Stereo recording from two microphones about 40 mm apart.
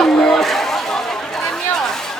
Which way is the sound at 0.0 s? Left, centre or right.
Centre.